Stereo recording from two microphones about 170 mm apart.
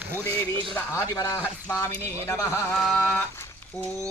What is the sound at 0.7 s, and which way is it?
Speech, 15° left (ahead or behind).